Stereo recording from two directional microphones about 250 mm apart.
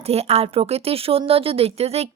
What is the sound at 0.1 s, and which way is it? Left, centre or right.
A woman's voice, right.